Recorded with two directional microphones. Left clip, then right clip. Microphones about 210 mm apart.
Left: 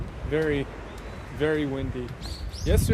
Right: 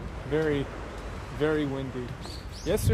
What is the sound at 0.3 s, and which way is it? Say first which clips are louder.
Speech: left 1 dB; 15° left (ahead or behind).